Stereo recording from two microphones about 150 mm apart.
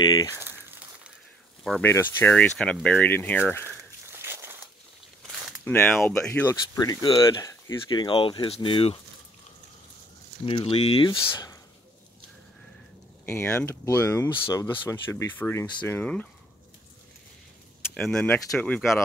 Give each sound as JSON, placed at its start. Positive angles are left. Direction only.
{"t": 0.0, "sound": "speech", "side_deg": 25}
{"t": 0.4, "sound": "a sound", "side_deg": -15}
{"t": 1.8, "sound": "speech", "side_deg": 15}
{"t": 3.6, "sound": "walk", "side_deg": -15}
{"t": 5.7, "sound": "speech", "side_deg": 5}
{"t": 6.7, "sound": "speech", "side_deg": 25}
{"t": 10.4, "sound": "speech", "side_deg": 40}
{"t": 11.1, "sound": "speech", "side_deg": 25}
{"t": 13.2, "sound": "speech", "side_deg": 15}
{"t": 17.9, "sound": "speech", "side_deg": 5}